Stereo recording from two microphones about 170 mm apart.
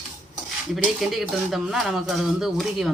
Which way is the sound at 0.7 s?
Centre (ahead or behind).